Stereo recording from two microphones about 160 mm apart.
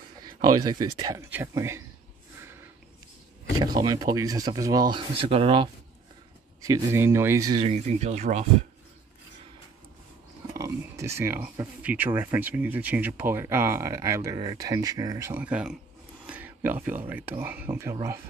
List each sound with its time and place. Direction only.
0.2 s speech: 25° right (ahead or behind)
3.5 s speech: 25° right (ahead or behind)
6.6 s speech: 20° right (ahead or behind)
7.6 s speech: 45° right (ahead or behind)
10.5 s speech: 20° right (ahead or behind)